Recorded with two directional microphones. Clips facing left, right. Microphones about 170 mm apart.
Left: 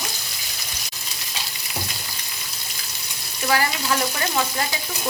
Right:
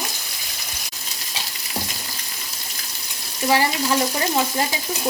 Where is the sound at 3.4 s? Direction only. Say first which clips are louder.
Right 3 dB; 25° right (ahead or behind).